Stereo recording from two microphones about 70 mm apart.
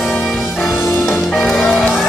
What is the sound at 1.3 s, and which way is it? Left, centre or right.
Music, centre.